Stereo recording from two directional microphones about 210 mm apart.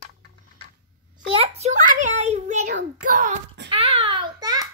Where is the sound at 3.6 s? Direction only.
25° right (ahead or behind).